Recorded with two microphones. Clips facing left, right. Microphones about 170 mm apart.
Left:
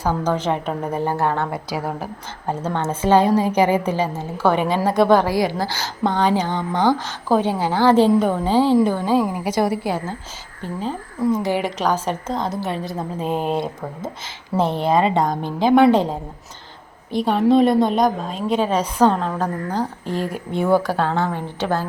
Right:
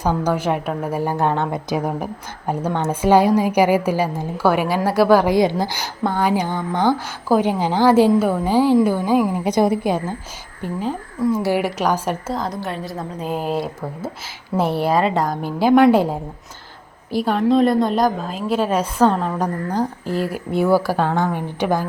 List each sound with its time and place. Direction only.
0.0 s a woman's voice: 15° right (ahead or behind)
5.3 s a woman's voice: 20° right (ahead or behind)